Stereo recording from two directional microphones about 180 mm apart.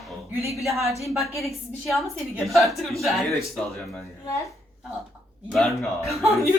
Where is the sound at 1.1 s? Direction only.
Centre (ahead or behind).